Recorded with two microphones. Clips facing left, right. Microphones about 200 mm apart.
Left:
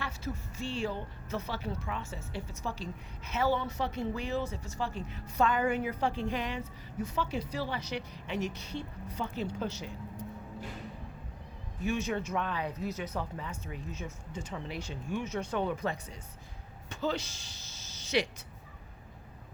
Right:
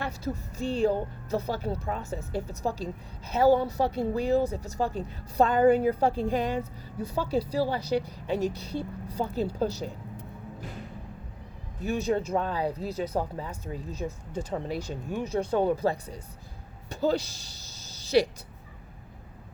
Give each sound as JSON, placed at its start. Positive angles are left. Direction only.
{"t": 0.3, "sound": "speech", "side_deg": -40}
{"t": 11.9, "sound": "speech", "side_deg": -35}
{"t": 18.0, "sound": "a sound", "side_deg": -35}